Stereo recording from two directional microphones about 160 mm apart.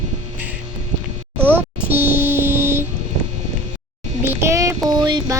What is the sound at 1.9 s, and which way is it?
Music, 15° right (ahead or behind).